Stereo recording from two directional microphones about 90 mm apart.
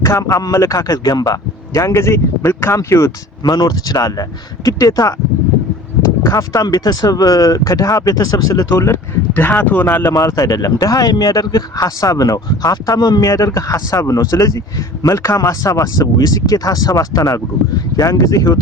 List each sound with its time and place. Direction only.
0.0 s speech: 40° left (ahead or behind)
1.8 s speech: 30° left (ahead or behind)
3.4 s speech: 50° left (ahead or behind)
6.3 s speech: 45° left (ahead or behind)
9.3 s speech: 15° left (ahead or behind)
10.1 s speech: 35° left (ahead or behind)